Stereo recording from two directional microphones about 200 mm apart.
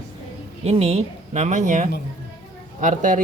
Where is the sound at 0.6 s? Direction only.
30° right (ahead or behind).